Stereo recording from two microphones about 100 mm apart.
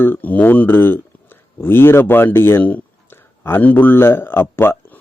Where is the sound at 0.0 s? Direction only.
20° left (ahead or behind).